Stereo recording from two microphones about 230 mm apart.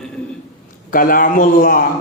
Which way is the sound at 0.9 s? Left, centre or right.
Left.